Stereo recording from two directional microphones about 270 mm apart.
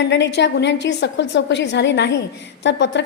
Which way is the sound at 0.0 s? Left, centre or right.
Left.